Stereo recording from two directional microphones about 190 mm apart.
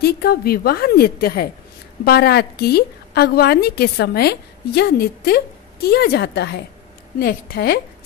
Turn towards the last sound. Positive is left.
turn(degrees=55)  # may be behind; listen again after turning